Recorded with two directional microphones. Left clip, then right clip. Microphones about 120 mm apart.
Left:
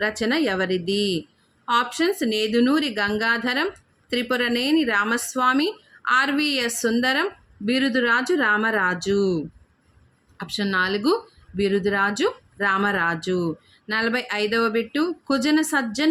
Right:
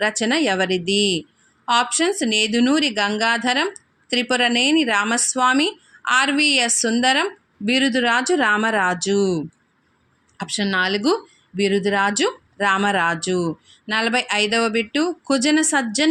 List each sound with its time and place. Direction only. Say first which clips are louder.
0.0 s speech: right 3 dB; 40° right (ahead or behind)